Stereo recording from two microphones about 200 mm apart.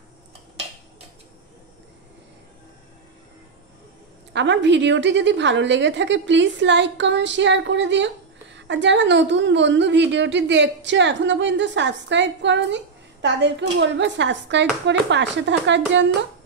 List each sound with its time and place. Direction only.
4.3 s a woman's voice: 60° right (ahead or behind)